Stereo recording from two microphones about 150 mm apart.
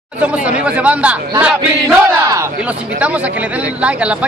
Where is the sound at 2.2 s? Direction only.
20° right (ahead or behind).